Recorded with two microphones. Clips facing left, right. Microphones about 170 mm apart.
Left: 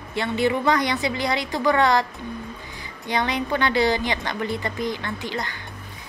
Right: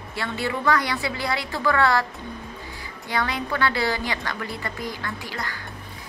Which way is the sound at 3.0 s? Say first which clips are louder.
Left 3 dB; 20° left (ahead or behind).